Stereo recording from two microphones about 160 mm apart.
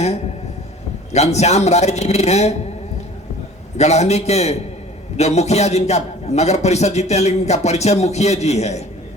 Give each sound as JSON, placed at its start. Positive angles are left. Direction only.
{"t": 1.1, "sound": "a man's voice", "side_deg": 45}
{"t": 3.8, "sound": "a man's voice", "side_deg": 45}